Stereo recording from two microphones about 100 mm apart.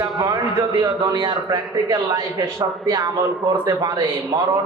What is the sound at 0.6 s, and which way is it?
A man's voice, 40° right (ahead or behind).